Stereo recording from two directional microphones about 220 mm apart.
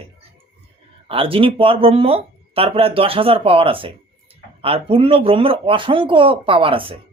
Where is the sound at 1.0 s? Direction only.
25° right (ahead or behind).